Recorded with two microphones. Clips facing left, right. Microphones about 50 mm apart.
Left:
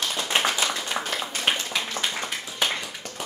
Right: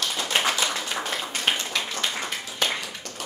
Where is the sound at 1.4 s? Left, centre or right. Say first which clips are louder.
Even; centre.